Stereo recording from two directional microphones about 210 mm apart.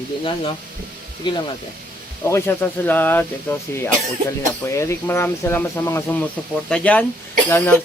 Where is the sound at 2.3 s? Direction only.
10° left (ahead or behind).